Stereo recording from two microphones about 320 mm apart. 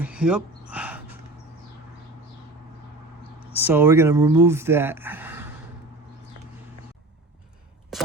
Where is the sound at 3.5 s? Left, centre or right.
Centre.